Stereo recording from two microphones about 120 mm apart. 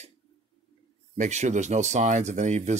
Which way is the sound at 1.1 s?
75° right (ahead or behind).